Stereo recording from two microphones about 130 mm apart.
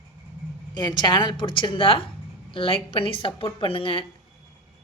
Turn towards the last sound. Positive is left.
turn(degrees=45)  # may be behind; listen again after turning